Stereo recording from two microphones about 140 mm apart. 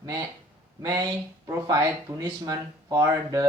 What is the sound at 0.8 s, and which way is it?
Speech, 25° right (ahead or behind).